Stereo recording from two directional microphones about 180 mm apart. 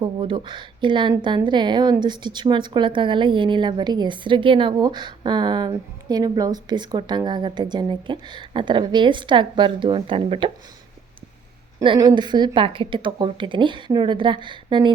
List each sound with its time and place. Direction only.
0.0 s a woman's voice: 30° right (ahead or behind)
11.8 s a woman's voice: 25° right (ahead or behind)